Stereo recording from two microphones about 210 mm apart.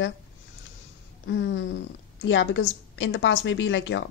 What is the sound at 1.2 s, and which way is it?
A woman's voice, 60° left (ahead or behind).